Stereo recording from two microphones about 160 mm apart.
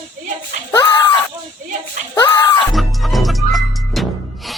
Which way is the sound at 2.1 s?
25° left (ahead or behind).